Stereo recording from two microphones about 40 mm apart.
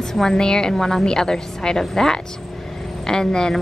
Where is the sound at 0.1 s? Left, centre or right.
Centre.